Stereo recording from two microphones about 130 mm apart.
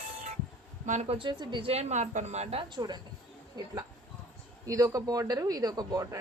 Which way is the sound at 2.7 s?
35° right (ahead or behind).